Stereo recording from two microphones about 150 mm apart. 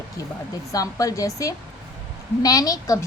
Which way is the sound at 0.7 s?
20° left (ahead or behind).